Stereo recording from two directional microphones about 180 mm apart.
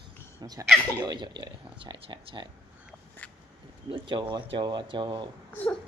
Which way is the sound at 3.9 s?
25° right (ahead or behind).